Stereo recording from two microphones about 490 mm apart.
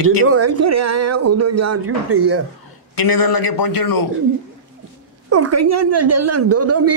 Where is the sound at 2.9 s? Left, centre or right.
Left.